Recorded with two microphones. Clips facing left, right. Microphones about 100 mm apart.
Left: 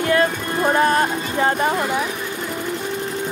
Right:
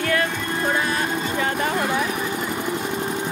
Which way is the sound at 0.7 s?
45° left (ahead or behind).